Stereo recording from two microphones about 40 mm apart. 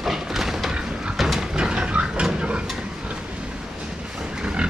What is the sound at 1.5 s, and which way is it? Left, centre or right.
Vehicle, right.